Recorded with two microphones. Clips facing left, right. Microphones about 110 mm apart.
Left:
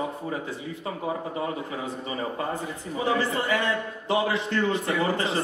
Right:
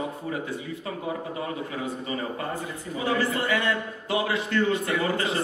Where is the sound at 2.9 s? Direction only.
25° left (ahead or behind).